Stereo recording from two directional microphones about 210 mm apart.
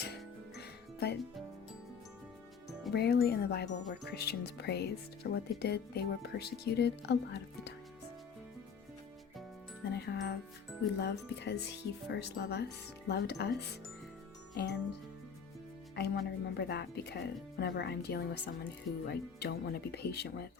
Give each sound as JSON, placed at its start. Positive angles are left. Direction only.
{"t": 0.6, "sound": "music", "side_deg": 50}
{"t": 2.9, "sound": "speech", "side_deg": 50}
{"t": 9.9, "sound": "speech", "side_deg": 50}
{"t": 14.5, "sound": "music", "side_deg": 50}
{"t": 16.0, "sound": "speech", "side_deg": 50}